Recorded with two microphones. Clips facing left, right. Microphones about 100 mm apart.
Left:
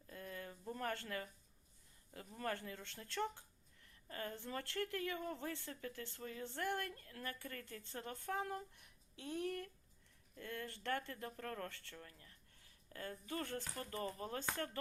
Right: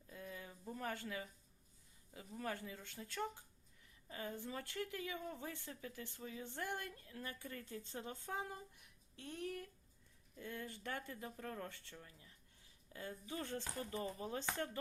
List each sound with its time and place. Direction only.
0.1 s a sound: 5° right (ahead or behind)
0.7 s speech: 5° right (ahead or behind)
9.1 s speech: centre (ahead or behind)
10.3 s speech: 15° right (ahead or behind)